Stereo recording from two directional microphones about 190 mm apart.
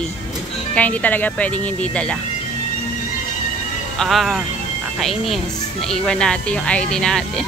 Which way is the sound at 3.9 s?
Centre (ahead or behind).